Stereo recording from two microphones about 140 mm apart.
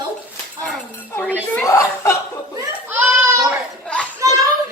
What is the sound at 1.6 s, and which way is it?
Chuckle, 20° left (ahead or behind).